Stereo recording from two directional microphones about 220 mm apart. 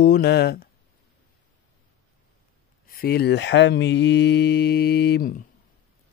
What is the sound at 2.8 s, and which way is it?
Speech, 45° left (ahead or behind).